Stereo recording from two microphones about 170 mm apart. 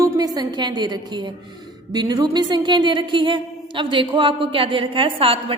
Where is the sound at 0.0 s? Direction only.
20° right (ahead or behind).